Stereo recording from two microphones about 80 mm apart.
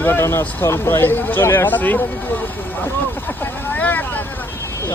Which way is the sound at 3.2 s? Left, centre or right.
Left.